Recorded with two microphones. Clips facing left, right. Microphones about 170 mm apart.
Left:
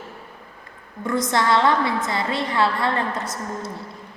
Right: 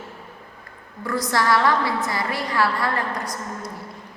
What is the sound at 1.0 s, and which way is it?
A woman's voice, 20° left (ahead or behind).